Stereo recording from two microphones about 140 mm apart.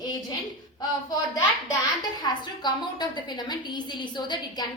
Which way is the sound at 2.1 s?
30° left (ahead or behind).